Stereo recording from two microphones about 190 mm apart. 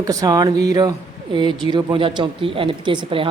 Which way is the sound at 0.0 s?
15° right (ahead or behind).